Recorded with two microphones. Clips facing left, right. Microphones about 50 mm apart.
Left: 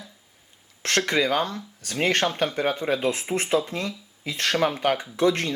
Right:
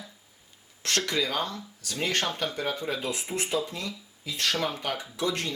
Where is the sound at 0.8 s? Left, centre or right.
Left.